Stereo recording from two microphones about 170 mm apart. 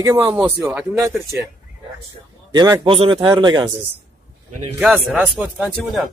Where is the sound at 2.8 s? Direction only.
30° right (ahead or behind).